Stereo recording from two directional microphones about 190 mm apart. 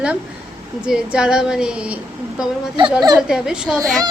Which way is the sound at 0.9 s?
5° right (ahead or behind).